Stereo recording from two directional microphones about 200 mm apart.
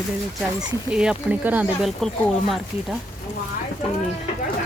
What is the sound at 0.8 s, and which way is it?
Speech, 5° right (ahead or behind).